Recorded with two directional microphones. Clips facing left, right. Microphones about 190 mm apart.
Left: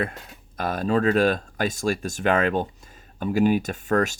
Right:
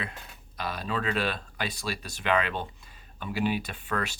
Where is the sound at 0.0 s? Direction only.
50° left (ahead or behind).